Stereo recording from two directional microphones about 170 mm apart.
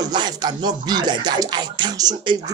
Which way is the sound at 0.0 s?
25° right (ahead or behind).